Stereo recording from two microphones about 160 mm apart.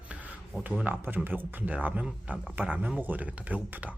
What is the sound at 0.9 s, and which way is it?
Speech, 15° right (ahead or behind).